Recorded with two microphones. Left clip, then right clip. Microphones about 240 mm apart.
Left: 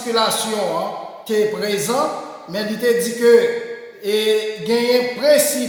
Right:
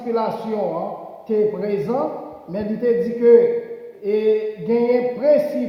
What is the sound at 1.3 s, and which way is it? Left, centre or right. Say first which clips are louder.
Speech: left 1 dB; left.